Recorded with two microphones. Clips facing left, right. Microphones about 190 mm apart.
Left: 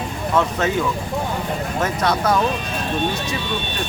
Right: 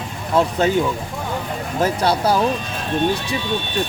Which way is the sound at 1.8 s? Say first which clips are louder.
Right 3 dB; 30° right (ahead or behind).